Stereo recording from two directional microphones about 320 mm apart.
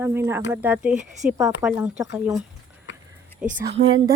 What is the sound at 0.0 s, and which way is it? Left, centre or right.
Speech, centre.